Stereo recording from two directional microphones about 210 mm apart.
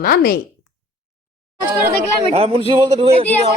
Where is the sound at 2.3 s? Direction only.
25° right (ahead or behind).